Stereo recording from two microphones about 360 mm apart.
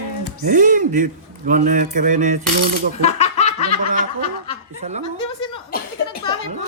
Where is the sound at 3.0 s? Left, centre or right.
Centre.